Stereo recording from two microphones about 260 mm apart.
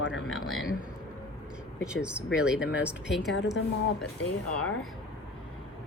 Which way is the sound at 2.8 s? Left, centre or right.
Centre.